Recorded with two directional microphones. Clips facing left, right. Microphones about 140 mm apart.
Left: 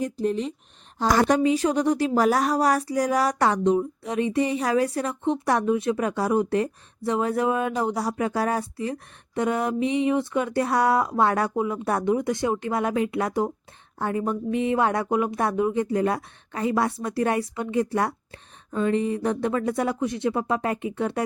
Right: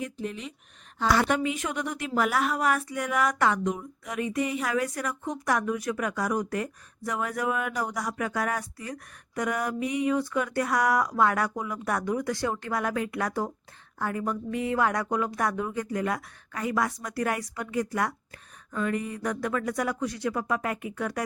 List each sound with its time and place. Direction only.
0.0 s speech: 35° left (ahead or behind)